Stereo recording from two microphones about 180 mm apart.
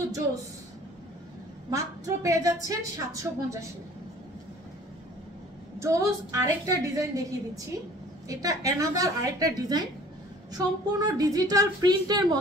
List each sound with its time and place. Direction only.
1.7 s a woman's voice: 20° right (ahead or behind)
5.8 s a woman's voice: 15° right (ahead or behind)